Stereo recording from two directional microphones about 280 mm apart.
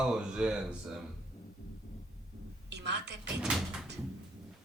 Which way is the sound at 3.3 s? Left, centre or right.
Centre.